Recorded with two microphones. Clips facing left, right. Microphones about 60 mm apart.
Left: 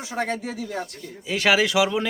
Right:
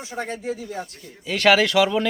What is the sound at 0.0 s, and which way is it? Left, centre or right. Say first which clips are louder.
Speech: left 2 dB; left.